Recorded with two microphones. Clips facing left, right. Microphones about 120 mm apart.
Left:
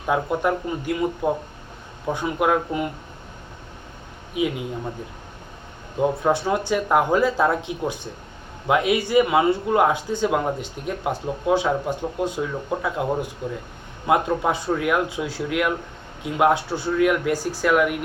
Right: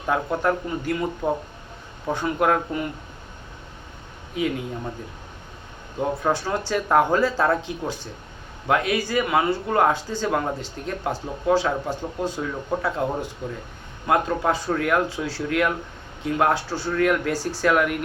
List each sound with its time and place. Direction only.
0.0 s speech: 10° left (ahead or behind)
4.4 s speech: 10° left (ahead or behind)
6.2 s speech: 15° left (ahead or behind)
14.1 s speech: 15° left (ahead or behind)